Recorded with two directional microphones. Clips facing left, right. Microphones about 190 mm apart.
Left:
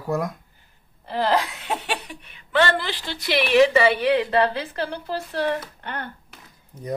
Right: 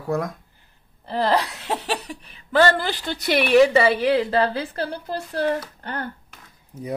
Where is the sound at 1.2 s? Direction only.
35° right (ahead or behind).